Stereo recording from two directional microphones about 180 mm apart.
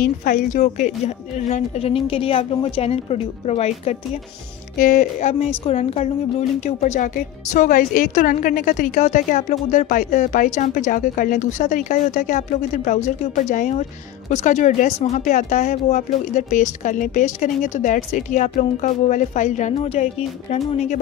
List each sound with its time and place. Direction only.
0.0 s a woman's voice: 45° left (ahead or behind)
4.7 s a woman's voice: 50° left (ahead or behind)
5.7 s a woman's voice: 35° left (ahead or behind)